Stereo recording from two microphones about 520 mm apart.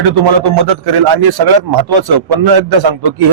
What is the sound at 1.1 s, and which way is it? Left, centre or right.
A man's voice, right.